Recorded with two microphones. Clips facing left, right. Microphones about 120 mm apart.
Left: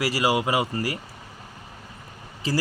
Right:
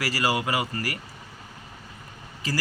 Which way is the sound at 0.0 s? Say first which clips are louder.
Left 3 dB; 20° left (ahead or behind).